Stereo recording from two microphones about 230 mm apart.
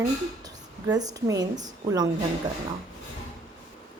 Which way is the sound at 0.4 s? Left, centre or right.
Centre.